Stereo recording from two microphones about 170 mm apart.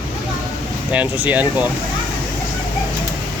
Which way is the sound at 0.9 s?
10° right (ahead or behind).